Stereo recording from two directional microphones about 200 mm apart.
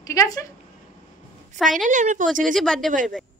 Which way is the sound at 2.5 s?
Centre (ahead or behind).